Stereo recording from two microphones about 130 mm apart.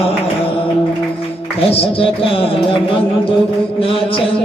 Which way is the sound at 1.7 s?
45° left (ahead or behind).